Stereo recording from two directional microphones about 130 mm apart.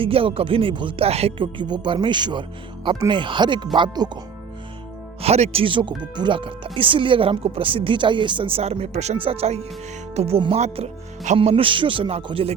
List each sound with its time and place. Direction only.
0.0 s speech: 45° right (ahead or behind)
5.2 s speech: 50° right (ahead or behind)
11.3 s speech: 45° right (ahead or behind)